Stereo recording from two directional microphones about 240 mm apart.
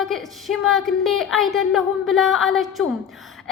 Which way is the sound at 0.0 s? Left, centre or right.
Centre.